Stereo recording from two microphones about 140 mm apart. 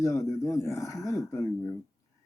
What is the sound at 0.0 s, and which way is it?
Speech, 25° left (ahead or behind).